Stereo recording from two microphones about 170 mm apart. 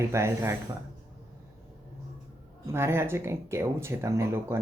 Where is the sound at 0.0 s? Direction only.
15° right (ahead or behind).